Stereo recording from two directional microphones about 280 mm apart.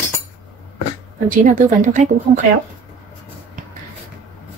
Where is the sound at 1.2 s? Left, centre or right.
Right.